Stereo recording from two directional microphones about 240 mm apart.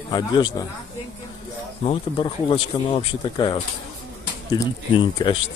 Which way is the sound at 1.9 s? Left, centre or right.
Left.